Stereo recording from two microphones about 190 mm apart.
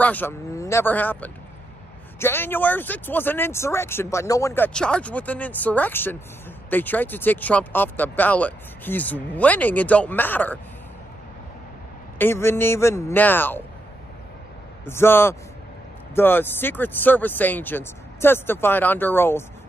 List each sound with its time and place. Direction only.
0.0 s speech: 10° left (ahead or behind)
12.2 s speech: 10° left (ahead or behind)
14.9 s speech: 10° left (ahead or behind)